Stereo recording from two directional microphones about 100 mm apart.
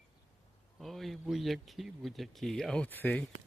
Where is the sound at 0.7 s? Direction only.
Centre (ahead or behind); by 3.2 s 15° left (ahead or behind).